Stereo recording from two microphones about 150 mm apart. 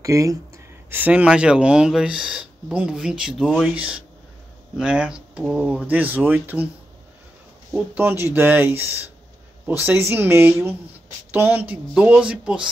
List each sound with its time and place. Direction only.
0.0 s speech: 20° right (ahead or behind)
7.7 s speech: 10° right (ahead or behind)